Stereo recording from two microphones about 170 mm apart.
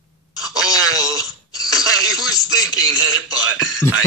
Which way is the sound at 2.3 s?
20° left (ahead or behind).